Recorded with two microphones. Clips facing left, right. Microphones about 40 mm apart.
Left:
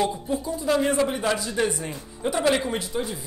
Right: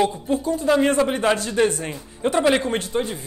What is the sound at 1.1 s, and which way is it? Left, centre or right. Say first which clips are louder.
Speech: right 5 dB; right.